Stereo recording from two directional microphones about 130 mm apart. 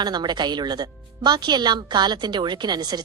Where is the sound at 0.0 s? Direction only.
35° right (ahead or behind).